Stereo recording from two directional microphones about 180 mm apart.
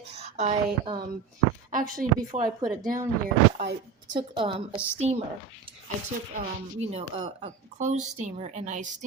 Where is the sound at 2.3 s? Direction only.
40° right (ahead or behind).